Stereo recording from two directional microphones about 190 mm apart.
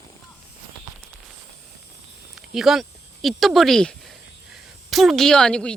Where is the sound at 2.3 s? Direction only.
Centre (ahead or behind).